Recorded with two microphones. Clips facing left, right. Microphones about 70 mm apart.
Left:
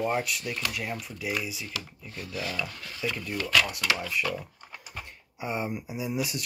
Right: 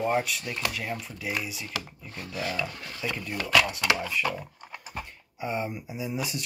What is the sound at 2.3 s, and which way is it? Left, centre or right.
Speech, right.